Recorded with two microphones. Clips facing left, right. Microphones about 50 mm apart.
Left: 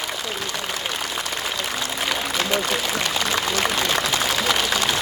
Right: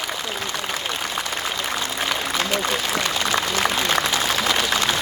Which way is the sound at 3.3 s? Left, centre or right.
Right.